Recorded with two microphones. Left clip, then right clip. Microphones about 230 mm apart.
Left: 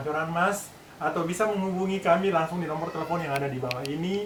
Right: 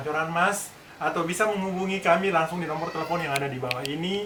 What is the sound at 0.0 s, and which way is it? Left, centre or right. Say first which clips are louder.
Speech: right 2 dB; centre.